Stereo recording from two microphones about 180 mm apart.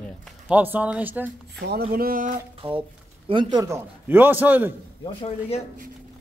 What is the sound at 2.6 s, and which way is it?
A man's voice, 30° right (ahead or behind).